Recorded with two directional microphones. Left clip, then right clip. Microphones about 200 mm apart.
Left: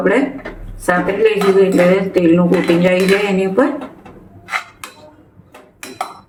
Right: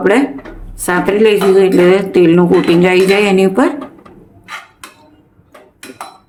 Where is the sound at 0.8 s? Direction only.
55° right (ahead or behind).